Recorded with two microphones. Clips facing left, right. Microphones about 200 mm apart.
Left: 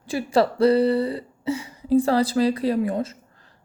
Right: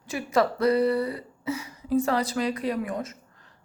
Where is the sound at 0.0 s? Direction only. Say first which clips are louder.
Left 4 dB; 30° left (ahead or behind).